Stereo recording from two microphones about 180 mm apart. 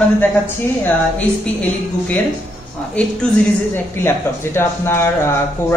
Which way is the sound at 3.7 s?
15° left (ahead or behind).